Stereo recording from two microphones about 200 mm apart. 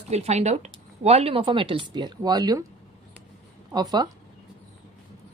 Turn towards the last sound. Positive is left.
turn(degrees=-20)  # may be behind; listen again after turning